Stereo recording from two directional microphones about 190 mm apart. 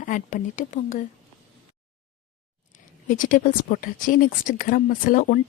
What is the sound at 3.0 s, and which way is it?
Speech, 45° left (ahead or behind).